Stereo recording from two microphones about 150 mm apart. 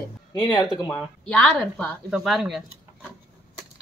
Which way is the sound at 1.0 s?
Centre (ahead or behind).